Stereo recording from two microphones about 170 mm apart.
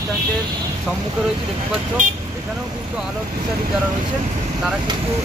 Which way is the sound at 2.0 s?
45° right (ahead or behind).